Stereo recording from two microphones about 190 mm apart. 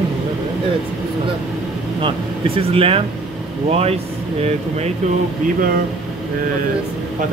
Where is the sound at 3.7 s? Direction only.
30° right (ahead or behind).